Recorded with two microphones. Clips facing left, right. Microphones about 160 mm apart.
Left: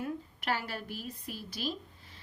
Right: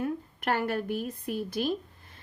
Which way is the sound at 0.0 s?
55° right (ahead or behind).